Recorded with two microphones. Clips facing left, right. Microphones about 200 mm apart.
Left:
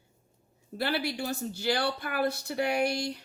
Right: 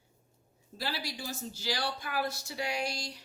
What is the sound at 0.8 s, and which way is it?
Speech, 60° left (ahead or behind).